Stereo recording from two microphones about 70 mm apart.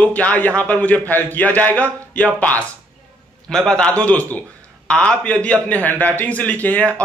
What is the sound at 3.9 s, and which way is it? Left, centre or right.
A man's voice, centre.